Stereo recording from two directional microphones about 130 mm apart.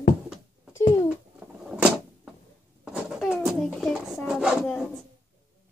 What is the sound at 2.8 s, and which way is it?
Cat, 10° right (ahead or behind).